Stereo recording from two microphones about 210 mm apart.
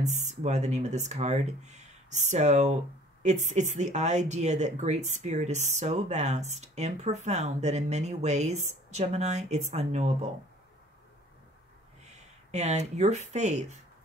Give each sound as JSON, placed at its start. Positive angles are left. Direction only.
{"t": 0.0, "sound": "speech", "side_deg": -35}
{"t": 12.1, "sound": "speech", "side_deg": -35}